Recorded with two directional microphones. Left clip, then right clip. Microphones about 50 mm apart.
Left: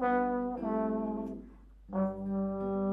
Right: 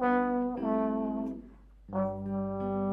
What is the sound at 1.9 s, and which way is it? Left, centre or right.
Brass instrument, centre.